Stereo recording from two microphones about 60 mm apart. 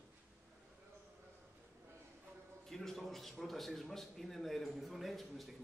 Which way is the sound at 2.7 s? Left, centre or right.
Centre.